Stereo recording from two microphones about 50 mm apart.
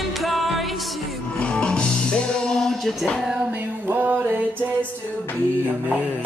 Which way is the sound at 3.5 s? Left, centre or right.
Right.